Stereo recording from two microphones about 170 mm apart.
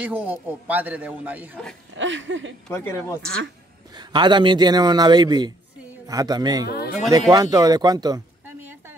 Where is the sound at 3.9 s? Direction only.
25° right (ahead or behind).